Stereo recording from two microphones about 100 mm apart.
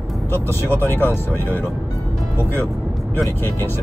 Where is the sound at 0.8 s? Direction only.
25° left (ahead or behind).